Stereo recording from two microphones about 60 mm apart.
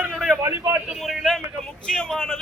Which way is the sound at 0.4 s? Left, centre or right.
Right.